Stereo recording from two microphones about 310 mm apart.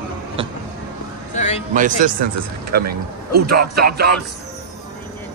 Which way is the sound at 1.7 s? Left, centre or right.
Right.